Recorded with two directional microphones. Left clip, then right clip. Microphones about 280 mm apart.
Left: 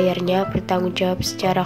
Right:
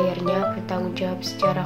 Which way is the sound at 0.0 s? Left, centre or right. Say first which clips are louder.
Left 3 dB; left.